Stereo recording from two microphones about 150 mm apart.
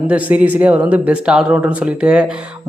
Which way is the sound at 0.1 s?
10° right (ahead or behind).